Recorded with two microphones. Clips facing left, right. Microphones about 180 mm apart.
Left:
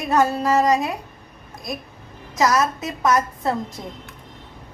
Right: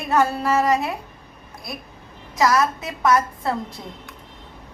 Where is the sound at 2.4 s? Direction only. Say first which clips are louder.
Even; 20° left (ahead or behind).